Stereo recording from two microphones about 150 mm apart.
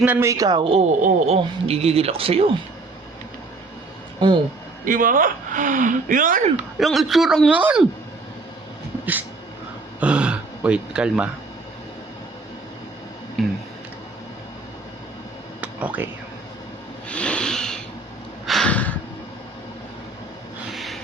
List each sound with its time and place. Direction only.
0.0 s speech: 15° right (ahead or behind); by 2.5 s 40° right (ahead or behind)
4.2 s speech: 30° right (ahead or behind)
4.9 s speech: 65° right (ahead or behind)
6.7 s a man's voice: centre (ahead or behind)
10.0 s speech: 5° right (ahead or behind)
13.4 s tick-tock: centre (ahead or behind)
15.6 s a sound: 10° right (ahead or behind)
17.1 s vehicle: 10° left (ahead or behind)
18.4 s a sound: 5° left (ahead or behind)
20.7 s a sound: centre (ahead or behind)